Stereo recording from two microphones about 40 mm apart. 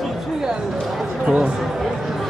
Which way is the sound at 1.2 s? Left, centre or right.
Right.